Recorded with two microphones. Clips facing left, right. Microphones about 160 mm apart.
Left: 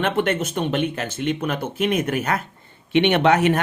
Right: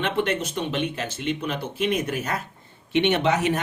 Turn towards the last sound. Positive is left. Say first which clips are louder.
# left 5 dB
turn(degrees=60)  # may be behind; listen again after turning